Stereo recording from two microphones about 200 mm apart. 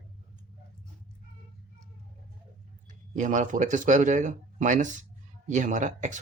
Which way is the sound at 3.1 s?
40° right (ahead or behind).